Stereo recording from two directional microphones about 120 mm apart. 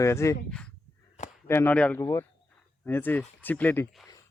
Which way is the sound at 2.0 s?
25° left (ahead or behind).